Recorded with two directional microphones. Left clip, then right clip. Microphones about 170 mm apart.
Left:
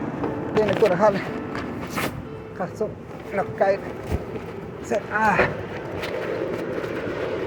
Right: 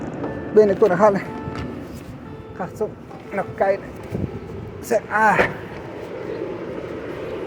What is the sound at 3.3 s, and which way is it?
Speech, 35° right (ahead or behind).